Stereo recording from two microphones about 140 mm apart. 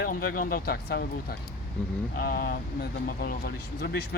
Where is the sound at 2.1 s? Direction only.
90° left.